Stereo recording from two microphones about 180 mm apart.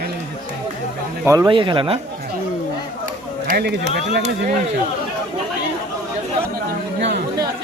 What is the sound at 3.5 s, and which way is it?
Speech, 60° right (ahead or behind).